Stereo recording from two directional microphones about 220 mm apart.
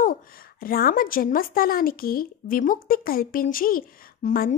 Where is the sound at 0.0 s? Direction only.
40° left (ahead or behind).